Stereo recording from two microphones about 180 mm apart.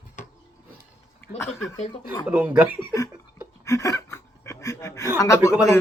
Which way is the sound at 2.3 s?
10° right (ahead or behind).